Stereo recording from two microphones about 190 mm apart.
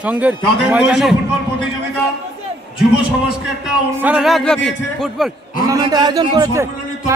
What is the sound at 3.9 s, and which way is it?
A man's voice, 5° right (ahead or behind).